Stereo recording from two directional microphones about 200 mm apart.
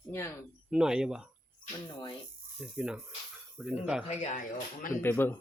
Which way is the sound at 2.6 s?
5° right (ahead or behind).